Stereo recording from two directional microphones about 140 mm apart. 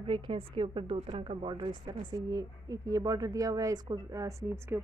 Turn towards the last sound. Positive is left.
turn(degrees=-20)  # may be behind; listen again after turning